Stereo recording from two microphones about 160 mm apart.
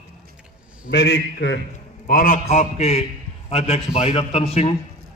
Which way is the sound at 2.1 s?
60° left (ahead or behind).